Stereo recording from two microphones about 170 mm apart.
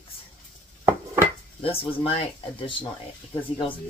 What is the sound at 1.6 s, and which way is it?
Speech, 35° left (ahead or behind).